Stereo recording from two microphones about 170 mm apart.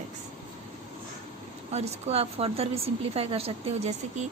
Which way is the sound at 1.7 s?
40° right (ahead or behind).